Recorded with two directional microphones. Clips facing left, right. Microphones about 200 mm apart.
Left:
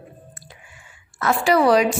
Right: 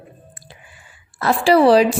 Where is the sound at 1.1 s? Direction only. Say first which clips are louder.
Right 4 dB; 30° right (ahead or behind).